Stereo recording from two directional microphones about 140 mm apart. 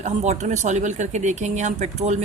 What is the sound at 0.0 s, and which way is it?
Speech, 55° right (ahead or behind).